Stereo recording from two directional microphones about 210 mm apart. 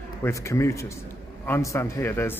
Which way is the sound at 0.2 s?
15° left (ahead or behind).